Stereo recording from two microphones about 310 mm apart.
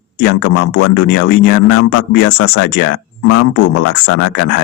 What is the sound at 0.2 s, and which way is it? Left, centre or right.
Speech, left.